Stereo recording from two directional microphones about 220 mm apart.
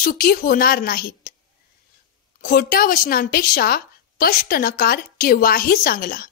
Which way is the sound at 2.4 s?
40° left (ahead or behind).